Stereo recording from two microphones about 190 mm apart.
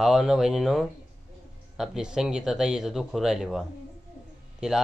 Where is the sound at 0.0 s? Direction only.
Centre (ahead or behind).